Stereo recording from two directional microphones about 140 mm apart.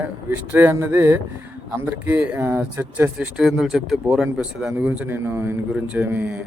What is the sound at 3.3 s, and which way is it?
A man's voice, 5° right (ahead or behind).